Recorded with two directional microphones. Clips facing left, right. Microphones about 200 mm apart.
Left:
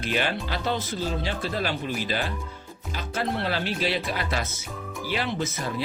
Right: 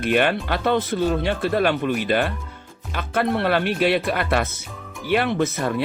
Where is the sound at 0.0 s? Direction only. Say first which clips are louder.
Right 7 dB; 60° right (ahead or behind).